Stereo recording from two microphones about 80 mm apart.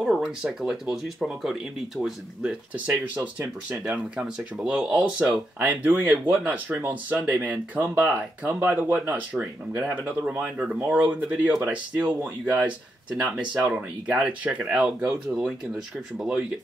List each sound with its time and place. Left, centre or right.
0.0 s speech: centre
3.3 s speech: centre
4.6 s speech: centre
5.6 s speech: right